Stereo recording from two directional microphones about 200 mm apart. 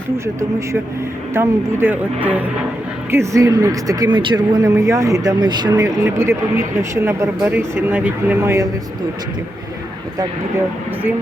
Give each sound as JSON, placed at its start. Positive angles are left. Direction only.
{"t": 1.3, "sound": "speech", "side_deg": -10}